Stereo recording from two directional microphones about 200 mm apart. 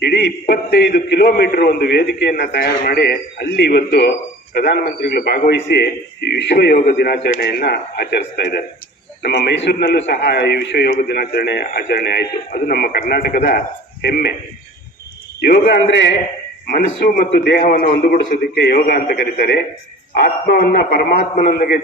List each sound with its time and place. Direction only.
0.0 s a man's voice: 55° left (ahead or behind)
15.4 s a man's voice: 55° left (ahead or behind)
16.6 s a man's voice: 45° left (ahead or behind)